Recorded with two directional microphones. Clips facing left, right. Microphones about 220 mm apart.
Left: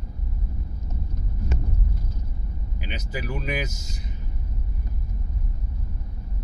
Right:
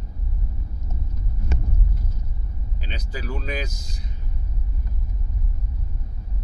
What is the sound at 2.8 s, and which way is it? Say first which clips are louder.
Speech: left 2 dB; 15° left (ahead or behind).